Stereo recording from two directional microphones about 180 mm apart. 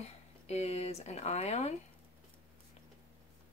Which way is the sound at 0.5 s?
35° left (ahead or behind).